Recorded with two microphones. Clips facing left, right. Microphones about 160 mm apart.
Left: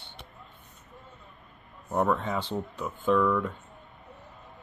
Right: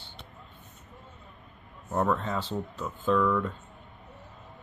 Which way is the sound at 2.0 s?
5° left (ahead or behind).